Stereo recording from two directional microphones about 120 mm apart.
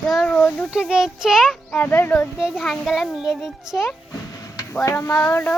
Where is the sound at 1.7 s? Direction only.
15° left (ahead or behind).